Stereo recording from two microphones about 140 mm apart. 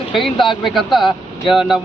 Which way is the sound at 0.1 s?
Centre (ahead or behind).